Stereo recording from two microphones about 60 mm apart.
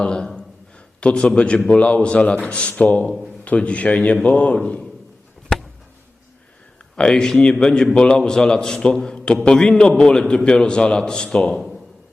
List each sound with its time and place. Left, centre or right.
0.0 s a man's voice: centre
6.9 s a man's voice: centre